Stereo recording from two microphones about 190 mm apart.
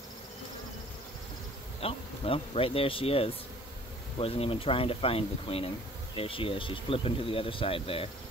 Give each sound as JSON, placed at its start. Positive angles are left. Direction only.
{"t": 1.8, "sound": "speech", "side_deg": 30}